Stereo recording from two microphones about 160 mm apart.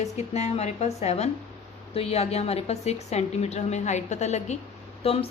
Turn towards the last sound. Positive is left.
turn(degrees=40)  # may be behind; listen again after turning